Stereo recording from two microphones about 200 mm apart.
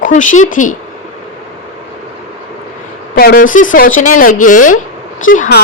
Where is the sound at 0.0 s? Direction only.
40° left (ahead or behind).